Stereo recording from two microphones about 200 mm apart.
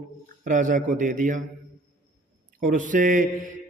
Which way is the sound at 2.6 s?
40° right (ahead or behind).